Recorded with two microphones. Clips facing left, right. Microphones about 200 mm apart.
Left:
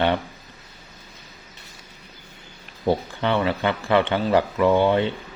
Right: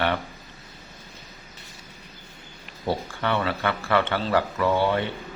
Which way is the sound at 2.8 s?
20° left (ahead or behind).